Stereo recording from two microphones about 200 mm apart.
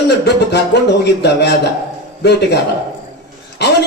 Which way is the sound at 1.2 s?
55° left (ahead or behind).